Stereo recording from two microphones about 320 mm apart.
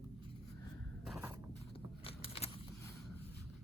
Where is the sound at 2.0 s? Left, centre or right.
Centre.